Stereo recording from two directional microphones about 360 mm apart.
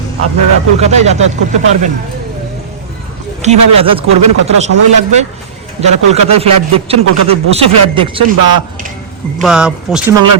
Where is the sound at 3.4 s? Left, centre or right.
Centre.